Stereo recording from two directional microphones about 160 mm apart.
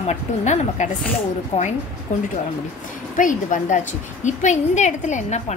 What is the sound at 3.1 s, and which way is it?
A woman's voice, 55° left (ahead or behind).